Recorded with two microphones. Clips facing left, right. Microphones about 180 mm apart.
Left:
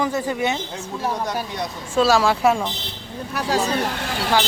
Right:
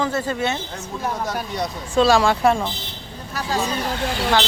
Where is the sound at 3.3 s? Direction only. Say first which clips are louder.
Left 2 dB; 60° left (ahead or behind).